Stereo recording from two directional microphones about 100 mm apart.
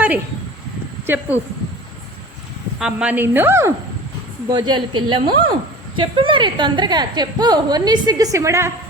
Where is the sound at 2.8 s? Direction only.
10° right (ahead or behind).